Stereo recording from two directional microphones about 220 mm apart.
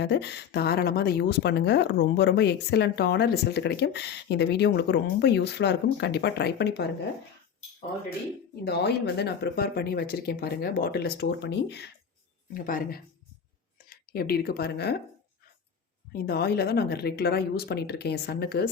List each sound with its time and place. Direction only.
0.0 s speech: 50° left (ahead or behind)
8.6 s speech: 50° left (ahead or behind)
12.5 s speech: 40° left (ahead or behind)
16.1 s speech: 45° left (ahead or behind)